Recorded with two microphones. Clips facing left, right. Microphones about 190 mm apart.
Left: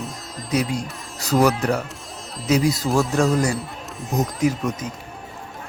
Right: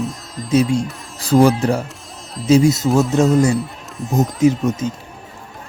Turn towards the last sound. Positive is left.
turn(degrees=-25)  # may be behind; listen again after turning